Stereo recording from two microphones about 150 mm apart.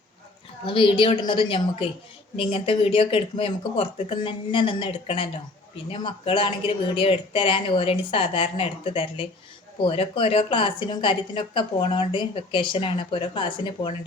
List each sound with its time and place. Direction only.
0.6 s a woman's voice: 35° left (ahead or behind)